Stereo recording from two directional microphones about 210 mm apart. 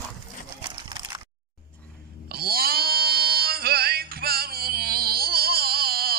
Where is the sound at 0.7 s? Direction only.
20° right (ahead or behind).